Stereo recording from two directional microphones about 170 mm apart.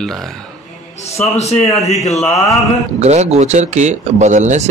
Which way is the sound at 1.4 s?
40° left (ahead or behind).